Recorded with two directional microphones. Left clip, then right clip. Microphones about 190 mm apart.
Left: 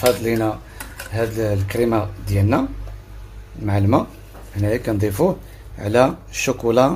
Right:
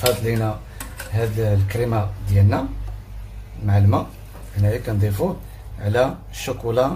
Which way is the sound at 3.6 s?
45° left (ahead or behind).